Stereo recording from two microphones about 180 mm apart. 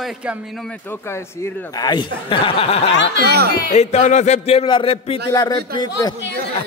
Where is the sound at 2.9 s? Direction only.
75° left (ahead or behind).